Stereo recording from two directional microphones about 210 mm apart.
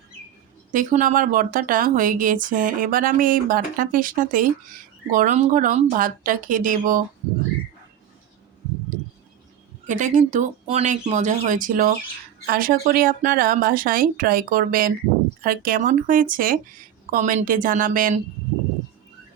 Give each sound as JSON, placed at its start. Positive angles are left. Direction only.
{"t": 0.7, "sound": "speech", "side_deg": -40}
{"t": 9.8, "sound": "speech", "side_deg": -35}